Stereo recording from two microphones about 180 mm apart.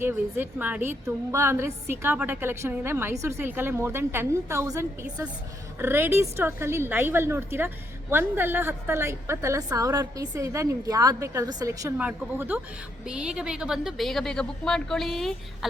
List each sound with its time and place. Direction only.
0.0 s a woman's voice: 15° right (ahead or behind)